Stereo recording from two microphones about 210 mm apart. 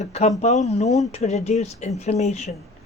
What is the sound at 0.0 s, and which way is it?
Speech, 30° left (ahead or behind).